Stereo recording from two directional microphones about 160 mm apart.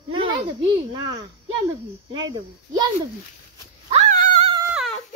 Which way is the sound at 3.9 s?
50° right (ahead or behind).